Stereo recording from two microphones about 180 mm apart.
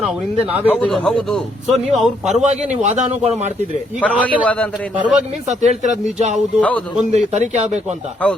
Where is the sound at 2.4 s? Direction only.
40° right (ahead or behind).